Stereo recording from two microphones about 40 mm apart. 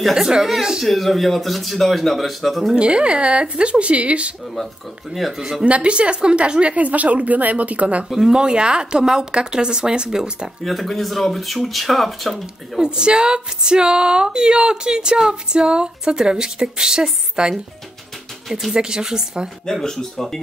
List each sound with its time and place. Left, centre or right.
0.1 s speech: centre
0.8 s speech: centre
2.7 s speech: right
5.6 s a woman's voice: right
8.3 s speech: right
10.6 s speech: centre
12.7 s speech: right
18.7 s speech: centre
19.6 s speech: centre